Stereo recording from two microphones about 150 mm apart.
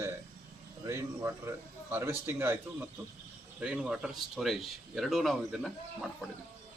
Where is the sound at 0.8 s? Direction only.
20° right (ahead or behind).